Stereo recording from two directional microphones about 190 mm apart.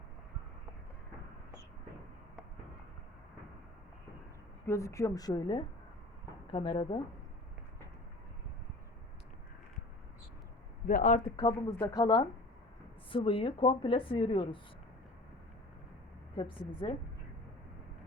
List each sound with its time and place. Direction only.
4.6 s a woman's voice: 15° left (ahead or behind)
10.8 s speech: 45° left (ahead or behind)
11.3 s a woman's voice: 20° left (ahead or behind)
16.3 s a woman's voice: 25° left (ahead or behind)